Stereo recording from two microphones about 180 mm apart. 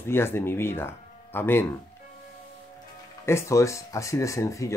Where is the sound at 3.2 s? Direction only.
15° left (ahead or behind).